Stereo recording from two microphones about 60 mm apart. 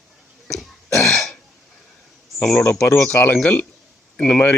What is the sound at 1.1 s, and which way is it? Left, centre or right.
Throat clearing, centre.